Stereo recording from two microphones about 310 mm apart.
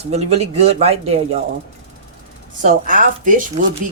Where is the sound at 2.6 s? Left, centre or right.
Right.